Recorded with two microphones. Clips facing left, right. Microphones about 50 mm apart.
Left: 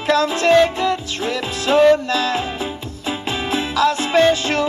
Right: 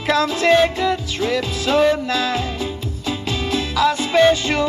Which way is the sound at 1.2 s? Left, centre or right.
Left.